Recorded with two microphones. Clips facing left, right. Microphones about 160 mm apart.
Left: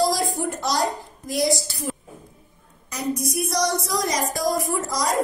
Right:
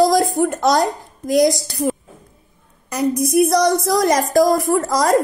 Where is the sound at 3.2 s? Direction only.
55° right (ahead or behind).